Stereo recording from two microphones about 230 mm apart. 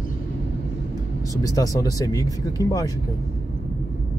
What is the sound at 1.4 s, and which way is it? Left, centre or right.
Speech, centre.